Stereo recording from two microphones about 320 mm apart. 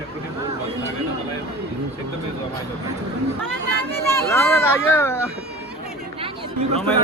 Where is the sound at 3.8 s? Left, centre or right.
Centre.